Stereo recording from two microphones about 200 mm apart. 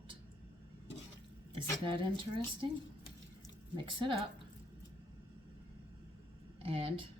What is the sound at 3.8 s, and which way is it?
Speech, 25° right (ahead or behind).